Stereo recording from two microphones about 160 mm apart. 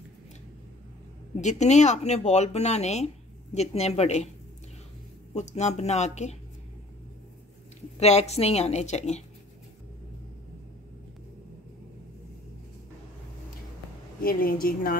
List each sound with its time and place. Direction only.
1.3 s speech: 45° left (ahead or behind)
5.3 s speech: 45° left (ahead or behind)
8.0 s speech: 40° left (ahead or behind)
14.2 s a woman's voice: 65° left (ahead or behind)